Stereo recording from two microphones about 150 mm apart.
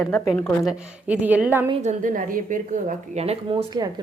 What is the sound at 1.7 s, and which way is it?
A woman's voice, 50° right (ahead or behind).